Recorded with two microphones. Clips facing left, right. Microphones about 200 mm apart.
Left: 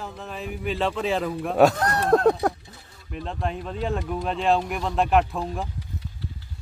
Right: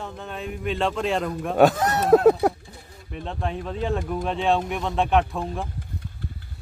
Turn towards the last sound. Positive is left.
turn(degrees=0)  # may be behind; listen again after turning